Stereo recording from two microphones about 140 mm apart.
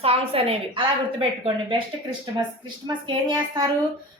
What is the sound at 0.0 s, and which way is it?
A woman's voice, 45° right (ahead or behind).